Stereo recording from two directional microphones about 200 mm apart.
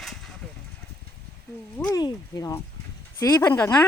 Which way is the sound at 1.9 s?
20° left (ahead or behind).